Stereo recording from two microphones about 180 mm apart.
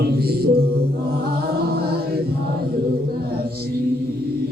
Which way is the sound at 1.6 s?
60° right (ahead or behind).